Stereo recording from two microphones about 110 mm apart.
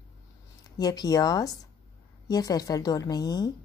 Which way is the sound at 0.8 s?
35° left (ahead or behind).